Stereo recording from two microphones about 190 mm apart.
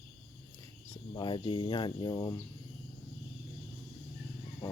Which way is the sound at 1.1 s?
25° left (ahead or behind).